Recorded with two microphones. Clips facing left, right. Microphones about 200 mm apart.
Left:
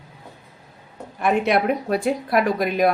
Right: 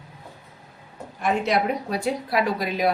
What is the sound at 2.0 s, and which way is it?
Speech, 50° left (ahead or behind).